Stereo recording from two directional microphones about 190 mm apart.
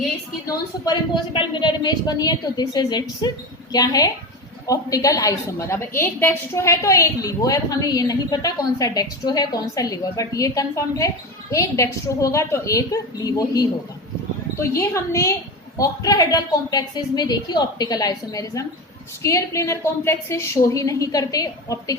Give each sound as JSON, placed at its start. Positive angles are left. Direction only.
{"t": 0.4, "sound": "a woman's voice", "side_deg": 25}